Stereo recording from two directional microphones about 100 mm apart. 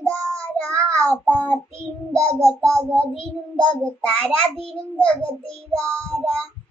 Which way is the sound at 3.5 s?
10° left (ahead or behind).